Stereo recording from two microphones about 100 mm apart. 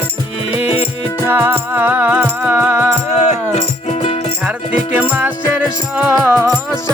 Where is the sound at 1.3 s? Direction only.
20° right (ahead or behind).